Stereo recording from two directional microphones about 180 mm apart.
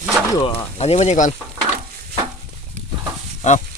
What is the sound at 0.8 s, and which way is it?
Speech, 35° left (ahead or behind).